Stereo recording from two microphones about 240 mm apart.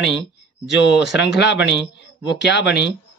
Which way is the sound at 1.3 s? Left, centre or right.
Left.